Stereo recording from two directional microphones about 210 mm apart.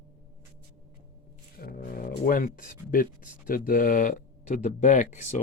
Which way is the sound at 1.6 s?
45° left (ahead or behind).